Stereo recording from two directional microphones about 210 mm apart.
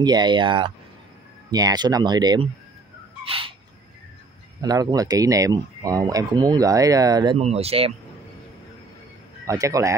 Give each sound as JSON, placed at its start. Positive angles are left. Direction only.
{"t": 0.0, "sound": "speech", "side_deg": -20}
{"t": 3.3, "sound": "owl", "side_deg": -25}
{"t": 4.6, "sound": "speech", "side_deg": -20}
{"t": 9.5, "sound": "speech", "side_deg": -15}